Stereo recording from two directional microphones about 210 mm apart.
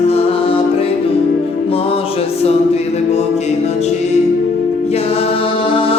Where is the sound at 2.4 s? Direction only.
30° left (ahead or behind).